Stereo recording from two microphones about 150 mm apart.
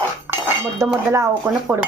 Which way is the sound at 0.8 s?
20° right (ahead or behind).